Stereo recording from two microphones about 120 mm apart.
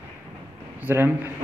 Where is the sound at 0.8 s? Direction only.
15° right (ahead or behind).